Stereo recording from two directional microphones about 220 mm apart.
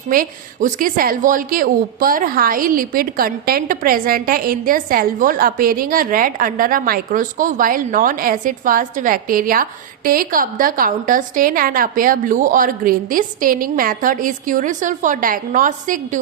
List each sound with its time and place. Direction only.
0.1 s a woman's voice: 40° right (ahead or behind)